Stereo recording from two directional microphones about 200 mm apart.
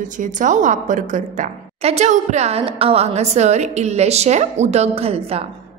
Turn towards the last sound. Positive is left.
turn(degrees=-30)  # may be behind; listen again after turning